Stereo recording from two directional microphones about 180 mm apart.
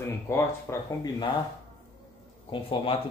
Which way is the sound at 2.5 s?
30° left (ahead or behind).